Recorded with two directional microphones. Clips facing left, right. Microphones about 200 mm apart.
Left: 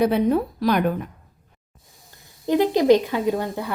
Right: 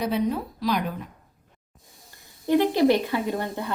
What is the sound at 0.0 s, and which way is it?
Speech, 55° left (ahead or behind).